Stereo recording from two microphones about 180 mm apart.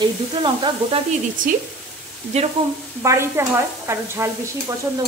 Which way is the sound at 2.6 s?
30° right (ahead or behind).